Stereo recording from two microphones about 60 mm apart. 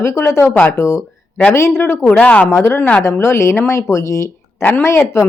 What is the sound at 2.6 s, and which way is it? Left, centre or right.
Speech, left.